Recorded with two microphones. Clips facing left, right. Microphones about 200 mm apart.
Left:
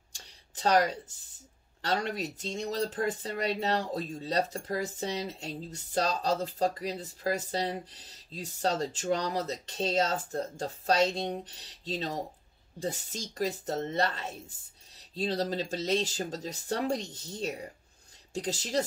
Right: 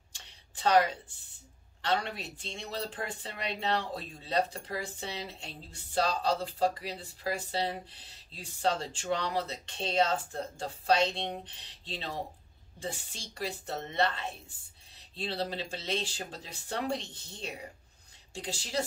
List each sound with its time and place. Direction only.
0.6 s speech: 40° left (ahead or behind)